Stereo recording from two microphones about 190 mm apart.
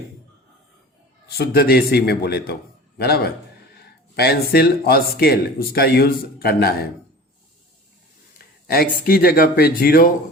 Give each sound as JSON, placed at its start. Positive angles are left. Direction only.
{"t": 1.4, "sound": "speech", "side_deg": 55}
{"t": 8.6, "sound": "speech", "side_deg": 55}